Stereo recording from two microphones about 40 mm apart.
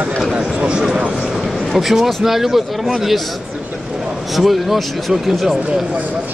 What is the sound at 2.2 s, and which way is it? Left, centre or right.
Speech, centre.